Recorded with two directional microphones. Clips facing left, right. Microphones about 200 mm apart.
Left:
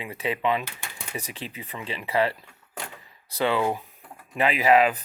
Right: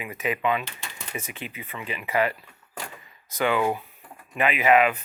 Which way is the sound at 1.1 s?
35° left (ahead or behind).